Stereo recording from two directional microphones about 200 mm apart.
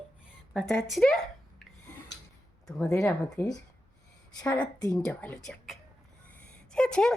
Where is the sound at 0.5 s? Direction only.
5° left (ahead or behind).